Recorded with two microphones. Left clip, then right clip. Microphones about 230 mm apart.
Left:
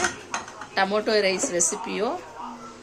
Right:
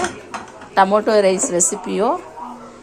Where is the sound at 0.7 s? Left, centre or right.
Centre.